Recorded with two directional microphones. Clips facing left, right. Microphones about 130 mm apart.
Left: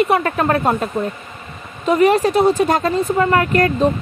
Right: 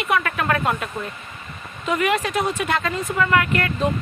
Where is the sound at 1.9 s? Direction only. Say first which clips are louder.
Left 8 dB; 35° left (ahead or behind).